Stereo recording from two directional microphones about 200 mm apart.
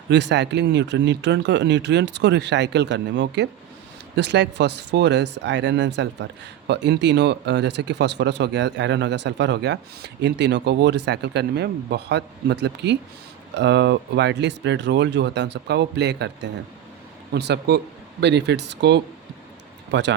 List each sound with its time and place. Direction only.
0.1 s speech: 60° right (ahead or behind)